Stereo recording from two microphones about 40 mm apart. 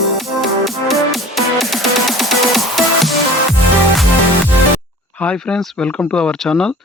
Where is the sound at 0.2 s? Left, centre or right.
Centre.